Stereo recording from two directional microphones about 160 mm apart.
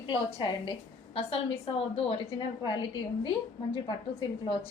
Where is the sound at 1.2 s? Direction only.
40° left (ahead or behind).